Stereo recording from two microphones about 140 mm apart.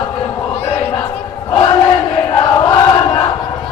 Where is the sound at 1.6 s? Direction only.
35° left (ahead or behind).